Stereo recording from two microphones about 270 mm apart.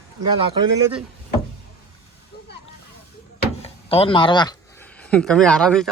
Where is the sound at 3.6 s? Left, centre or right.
Left.